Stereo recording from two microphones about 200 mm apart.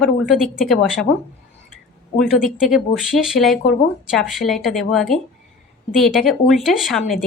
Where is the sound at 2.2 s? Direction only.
Centre (ahead or behind).